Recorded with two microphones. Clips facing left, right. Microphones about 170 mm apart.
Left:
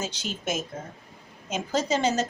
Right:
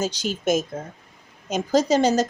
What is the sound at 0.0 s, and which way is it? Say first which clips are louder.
A woman's voice: right 8 dB; 40° right (ahead or behind).